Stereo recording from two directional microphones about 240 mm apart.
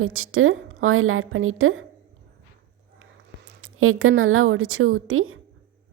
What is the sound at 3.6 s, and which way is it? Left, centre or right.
A woman's voice, right.